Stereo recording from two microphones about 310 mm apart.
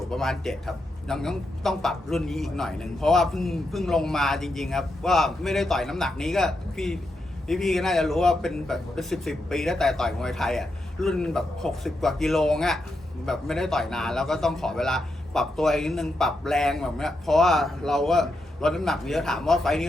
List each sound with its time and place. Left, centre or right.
0.1 s a man's voice: centre